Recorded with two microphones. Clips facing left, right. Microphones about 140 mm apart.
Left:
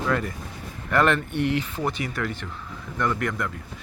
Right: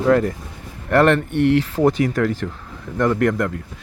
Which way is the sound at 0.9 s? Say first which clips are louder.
Right 6 dB; 70° right (ahead or behind).